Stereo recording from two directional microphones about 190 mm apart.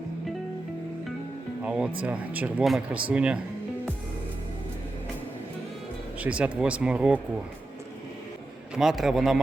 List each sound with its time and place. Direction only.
1.6 s a man's voice: 5° right (ahead or behind)
6.1 s a man's voice: 5° right (ahead or behind)
8.7 s a man's voice: centre (ahead or behind)